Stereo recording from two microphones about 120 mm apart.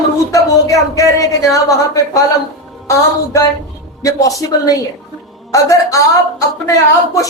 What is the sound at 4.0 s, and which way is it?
A woman's voice, 30° left (ahead or behind).